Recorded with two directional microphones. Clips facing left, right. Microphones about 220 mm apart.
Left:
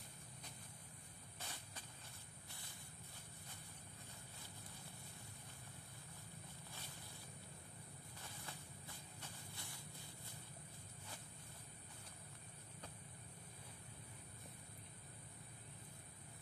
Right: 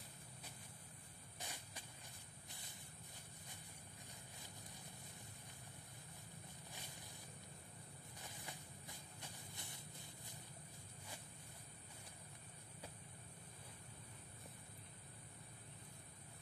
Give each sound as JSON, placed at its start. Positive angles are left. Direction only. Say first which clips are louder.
{"t": 1.4, "sound": "a sound", "louder": "right 1 dB", "side_deg": -15}
{"t": 6.7, "sound": "vehicle", "louder": "right 2 dB", "side_deg": -15}
{"t": 8.2, "sound": "shuffle", "louder": "right 1 dB", "side_deg": -15}